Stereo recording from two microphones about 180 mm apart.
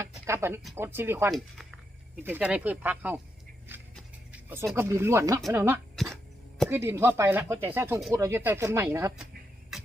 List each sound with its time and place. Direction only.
0.0 s a sound: 15° right (ahead or behind)
0.8 s speech: 10° right (ahead or behind)
1.3 s speech: centre (ahead or behind)
3.7 s a sound: 10° right (ahead or behind)
4.3 s music: 10° right (ahead or behind)
4.7 s speech: 15° right (ahead or behind)
9.7 s music: centre (ahead or behind)